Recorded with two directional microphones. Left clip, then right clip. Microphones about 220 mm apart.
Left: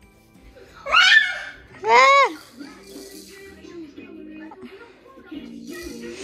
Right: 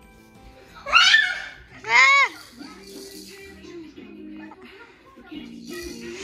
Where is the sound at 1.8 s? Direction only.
25° left (ahead or behind).